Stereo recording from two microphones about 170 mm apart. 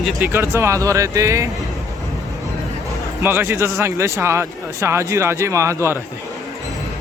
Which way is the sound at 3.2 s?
15° right (ahead or behind).